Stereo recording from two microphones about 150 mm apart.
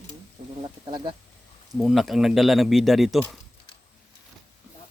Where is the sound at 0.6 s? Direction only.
30° right (ahead or behind).